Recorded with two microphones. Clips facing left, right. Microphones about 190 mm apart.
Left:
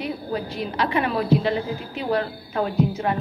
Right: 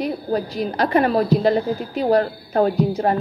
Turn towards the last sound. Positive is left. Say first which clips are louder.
# right 4 dB
turn(degrees=-40)  # may be behind; listen again after turning